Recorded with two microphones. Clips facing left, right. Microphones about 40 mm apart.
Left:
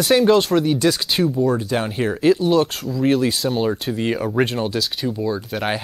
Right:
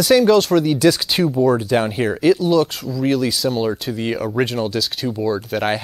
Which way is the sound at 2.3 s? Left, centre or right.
Left.